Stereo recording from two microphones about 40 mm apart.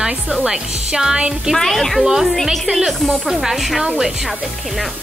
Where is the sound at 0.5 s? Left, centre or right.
Centre.